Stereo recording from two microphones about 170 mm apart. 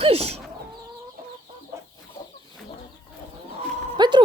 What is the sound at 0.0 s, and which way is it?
Chicken, 35° right (ahead or behind).